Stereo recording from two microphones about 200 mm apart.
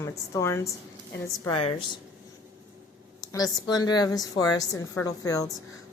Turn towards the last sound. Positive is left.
turn(degrees=15)  # may be behind; listen again after turning